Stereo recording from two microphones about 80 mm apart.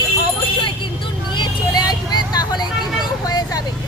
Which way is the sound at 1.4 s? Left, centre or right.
Left.